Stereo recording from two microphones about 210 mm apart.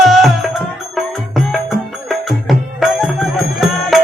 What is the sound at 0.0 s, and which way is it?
Music, centre (ahead or behind).